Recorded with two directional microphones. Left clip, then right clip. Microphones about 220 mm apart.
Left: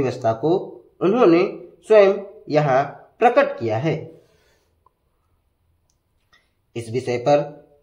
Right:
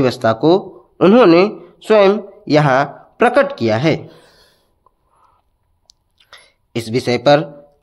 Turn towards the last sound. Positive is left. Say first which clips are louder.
# right 6 dB
turn(degrees=-40)  # may be behind; listen again after turning